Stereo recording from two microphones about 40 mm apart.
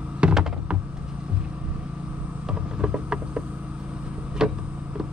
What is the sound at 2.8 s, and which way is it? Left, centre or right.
Vehicle, right.